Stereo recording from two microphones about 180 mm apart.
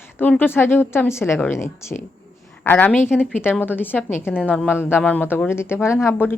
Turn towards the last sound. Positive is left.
turn(degrees=15)  # may be behind; listen again after turning